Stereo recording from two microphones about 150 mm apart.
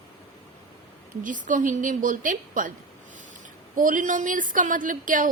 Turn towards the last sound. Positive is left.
turn(degrees=-60)  # may be behind; listen again after turning